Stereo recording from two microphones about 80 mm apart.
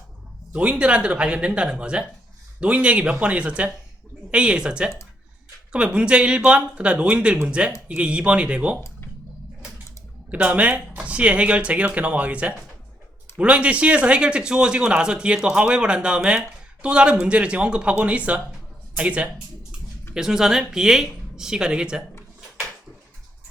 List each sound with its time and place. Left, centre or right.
0.5 s speech: centre
9.6 s a sound: centre
10.3 s speech: centre